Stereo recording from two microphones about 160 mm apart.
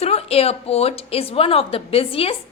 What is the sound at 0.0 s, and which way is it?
A woman's voice, 40° left (ahead or behind).